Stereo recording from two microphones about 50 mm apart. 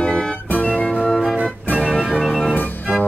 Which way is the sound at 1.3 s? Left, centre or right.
Right.